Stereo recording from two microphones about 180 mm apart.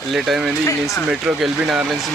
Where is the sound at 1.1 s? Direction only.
5° right (ahead or behind).